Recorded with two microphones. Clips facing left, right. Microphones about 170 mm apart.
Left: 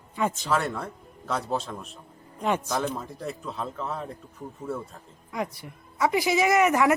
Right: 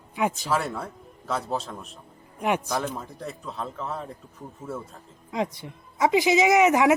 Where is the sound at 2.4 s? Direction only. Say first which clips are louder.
Right 1 dB; 15° right (ahead or behind).